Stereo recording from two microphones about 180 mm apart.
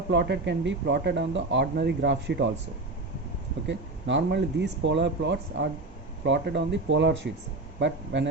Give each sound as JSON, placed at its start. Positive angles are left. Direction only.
{"t": 0.1, "sound": "speech", "side_deg": -70}
{"t": 3.7, "sound": "speech", "side_deg": -80}